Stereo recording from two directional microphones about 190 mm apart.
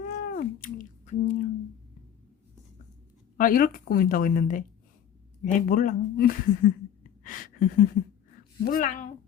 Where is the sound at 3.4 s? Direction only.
45° left (ahead or behind).